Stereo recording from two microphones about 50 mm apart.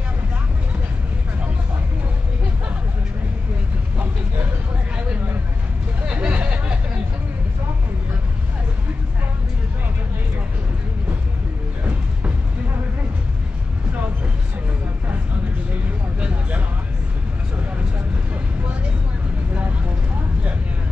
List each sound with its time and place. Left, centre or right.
6.1 s hubbub: right
15.7 s vehicle: right